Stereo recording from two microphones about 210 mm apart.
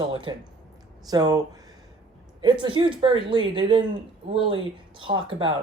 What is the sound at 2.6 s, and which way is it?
Speech, 25° right (ahead or behind).